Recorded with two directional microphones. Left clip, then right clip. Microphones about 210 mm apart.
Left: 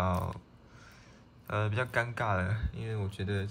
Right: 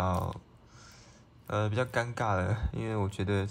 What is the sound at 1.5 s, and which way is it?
Speech, 10° right (ahead or behind).